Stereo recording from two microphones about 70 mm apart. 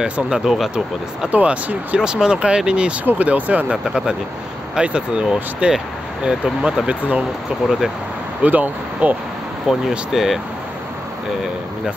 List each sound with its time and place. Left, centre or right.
0.0 s speech: centre
1.3 s speech: right
3.7 s speech: centre
8.4 s speech: right
9.7 s speech: centre